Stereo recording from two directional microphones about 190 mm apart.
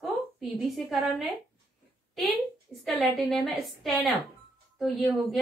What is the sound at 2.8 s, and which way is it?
A woman's voice, centre (ahead or behind).